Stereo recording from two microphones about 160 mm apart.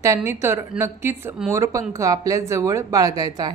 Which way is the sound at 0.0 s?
20° right (ahead or behind).